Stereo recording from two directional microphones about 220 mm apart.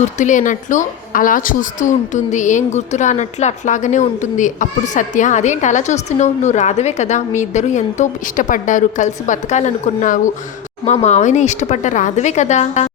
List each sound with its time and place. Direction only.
0.0 s a woman's voice: 35° left (ahead or behind)